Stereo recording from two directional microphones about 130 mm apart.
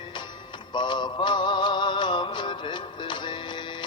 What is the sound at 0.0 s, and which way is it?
Music, 35° left (ahead or behind).